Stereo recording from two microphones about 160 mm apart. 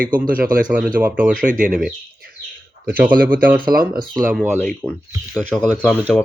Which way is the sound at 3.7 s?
65° right (ahead or behind).